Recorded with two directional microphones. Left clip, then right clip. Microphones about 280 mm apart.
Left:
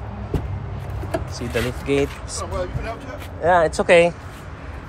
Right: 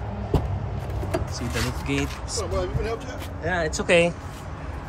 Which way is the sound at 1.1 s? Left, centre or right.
Centre.